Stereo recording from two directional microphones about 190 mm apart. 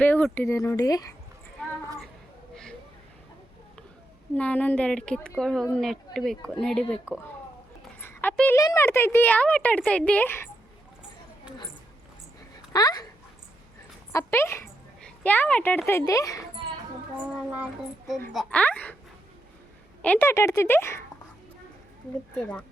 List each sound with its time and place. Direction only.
0.0 s a woman's voice: 10° left (ahead or behind)
1.6 s a sound: 5° left (ahead or behind)
4.4 s speech: 10° left (ahead or behind)
8.0 s a woman's voice: 10° left (ahead or behind)
12.7 s speech: 20° left (ahead or behind)
14.1 s a woman's voice: 15° left (ahead or behind)
18.3 s a woman's voice: 5° left (ahead or behind)
20.0 s a woman's voice: 10° left (ahead or behind)
22.4 s speech: 5° left (ahead or behind)